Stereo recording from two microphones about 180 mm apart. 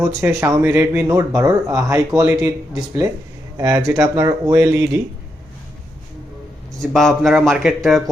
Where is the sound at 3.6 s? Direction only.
15° right (ahead or behind).